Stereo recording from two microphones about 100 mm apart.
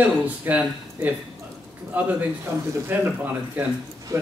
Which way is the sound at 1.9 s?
15° right (ahead or behind).